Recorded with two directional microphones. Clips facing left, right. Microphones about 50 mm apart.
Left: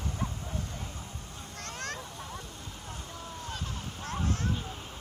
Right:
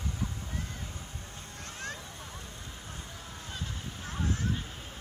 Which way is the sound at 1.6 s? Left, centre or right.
Left.